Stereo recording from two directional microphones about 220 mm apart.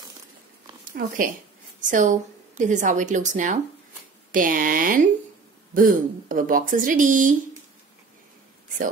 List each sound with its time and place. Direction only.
0.9 s a woman's voice: 40° right (ahead or behind)